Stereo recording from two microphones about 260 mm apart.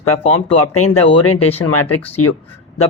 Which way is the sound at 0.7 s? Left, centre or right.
Left.